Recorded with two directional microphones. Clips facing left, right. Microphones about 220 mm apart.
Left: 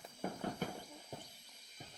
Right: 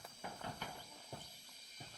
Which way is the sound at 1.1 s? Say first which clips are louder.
Left 2 dB; 20° left (ahead or behind).